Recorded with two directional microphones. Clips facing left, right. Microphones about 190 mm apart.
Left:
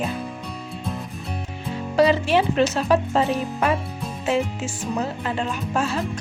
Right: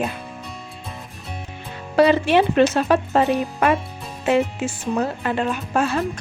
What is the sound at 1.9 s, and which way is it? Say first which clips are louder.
Speech: right 3 dB; 60° right (ahead or behind).